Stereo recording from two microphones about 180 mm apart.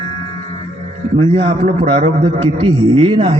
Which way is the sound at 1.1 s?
30° right (ahead or behind).